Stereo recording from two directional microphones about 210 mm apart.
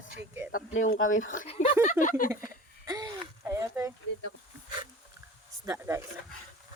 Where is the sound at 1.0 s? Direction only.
70° left (ahead or behind).